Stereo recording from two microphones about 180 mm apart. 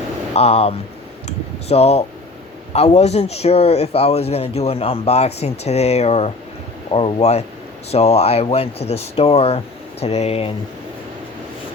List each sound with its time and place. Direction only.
0.3 s speech: 35° left (ahead or behind)